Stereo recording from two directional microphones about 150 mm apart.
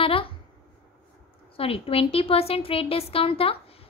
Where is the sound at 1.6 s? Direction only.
40° left (ahead or behind).